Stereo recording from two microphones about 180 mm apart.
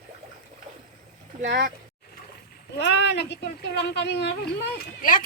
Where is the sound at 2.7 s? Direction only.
70° left (ahead or behind).